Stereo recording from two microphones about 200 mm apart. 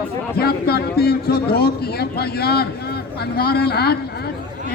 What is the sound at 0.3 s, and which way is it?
A man's voice, 50° left (ahead or behind).